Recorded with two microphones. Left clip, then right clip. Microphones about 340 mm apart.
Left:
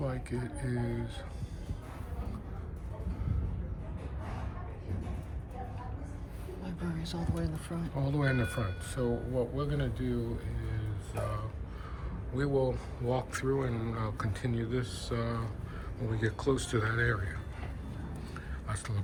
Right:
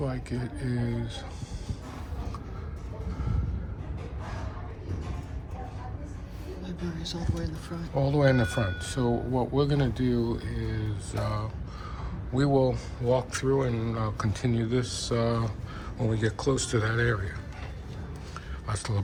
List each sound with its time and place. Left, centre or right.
0.0 s speech: centre
6.7 s speech: centre
7.9 s speech: centre
12.3 s speech: centre
18.7 s speech: centre